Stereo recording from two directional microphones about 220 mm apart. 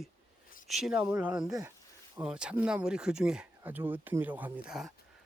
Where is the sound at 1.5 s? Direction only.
15° right (ahead or behind).